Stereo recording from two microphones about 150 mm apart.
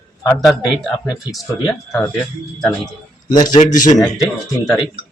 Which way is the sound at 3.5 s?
55° left (ahead or behind).